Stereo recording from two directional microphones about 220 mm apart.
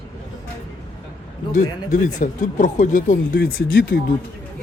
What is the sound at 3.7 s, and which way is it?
Speech, 55° left (ahead or behind).